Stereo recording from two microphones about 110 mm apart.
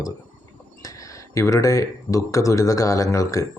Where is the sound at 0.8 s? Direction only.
30° left (ahead or behind).